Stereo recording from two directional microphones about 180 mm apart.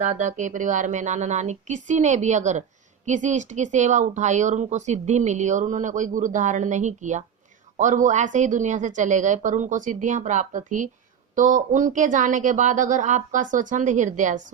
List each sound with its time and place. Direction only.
0.2 s speech: 45° right (ahead or behind)